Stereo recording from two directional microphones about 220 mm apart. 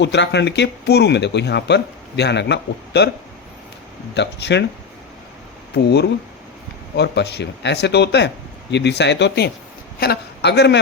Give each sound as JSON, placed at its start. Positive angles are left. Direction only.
{"t": 0.0, "sound": "speech", "side_deg": 50}
{"t": 4.1, "sound": "speech", "side_deg": 50}
{"t": 5.7, "sound": "speech", "side_deg": 50}